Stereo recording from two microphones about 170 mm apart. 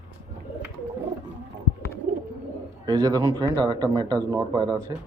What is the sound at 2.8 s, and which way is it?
Speech, 25° right (ahead or behind).